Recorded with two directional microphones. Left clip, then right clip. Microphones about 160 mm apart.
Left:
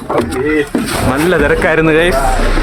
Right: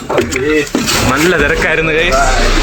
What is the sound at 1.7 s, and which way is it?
Speech, 40° left (ahead or behind).